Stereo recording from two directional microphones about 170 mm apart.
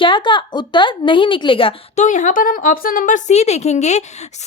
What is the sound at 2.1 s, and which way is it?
A woman's voice, 50° left (ahead or behind).